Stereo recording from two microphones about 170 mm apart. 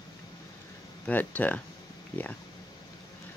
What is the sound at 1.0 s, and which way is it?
Speech, 10° left (ahead or behind).